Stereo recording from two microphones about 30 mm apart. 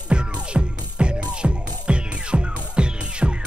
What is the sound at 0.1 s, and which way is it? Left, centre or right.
Music, right.